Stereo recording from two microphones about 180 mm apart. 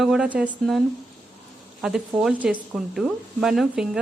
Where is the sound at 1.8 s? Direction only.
5° right (ahead or behind).